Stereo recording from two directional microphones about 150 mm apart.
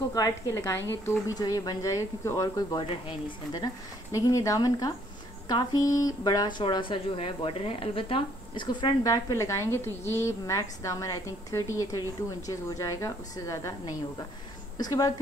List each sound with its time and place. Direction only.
0.1 s speech: 20° left (ahead or behind)